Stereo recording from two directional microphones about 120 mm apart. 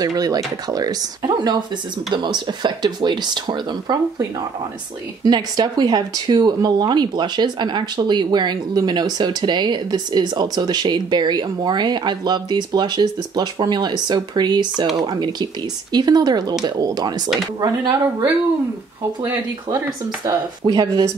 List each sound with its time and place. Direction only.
0.0 s speech: 30° right (ahead or behind)
20.2 s speech: 35° right (ahead or behind)